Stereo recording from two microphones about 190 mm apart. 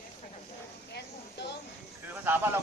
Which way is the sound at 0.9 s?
60° left (ahead or behind).